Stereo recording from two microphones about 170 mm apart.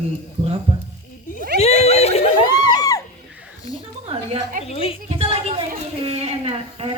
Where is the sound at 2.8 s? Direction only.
20° left (ahead or behind).